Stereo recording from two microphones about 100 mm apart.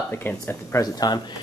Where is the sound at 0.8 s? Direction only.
40° left (ahead or behind).